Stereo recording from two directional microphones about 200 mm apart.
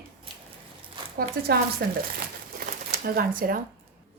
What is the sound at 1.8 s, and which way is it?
Speech, 50° right (ahead or behind).